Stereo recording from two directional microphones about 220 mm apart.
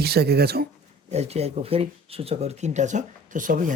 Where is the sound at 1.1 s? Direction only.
30° right (ahead or behind).